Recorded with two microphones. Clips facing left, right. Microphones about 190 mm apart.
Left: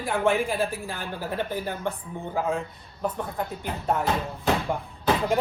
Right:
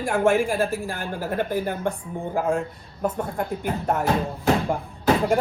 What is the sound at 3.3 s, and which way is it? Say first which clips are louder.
Speech: right 5 dB; 50° right (ahead or behind).